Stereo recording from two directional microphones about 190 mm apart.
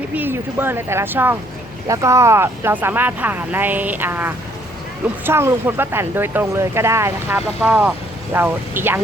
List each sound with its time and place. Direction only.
0.1 s speech: 10° right (ahead or behind)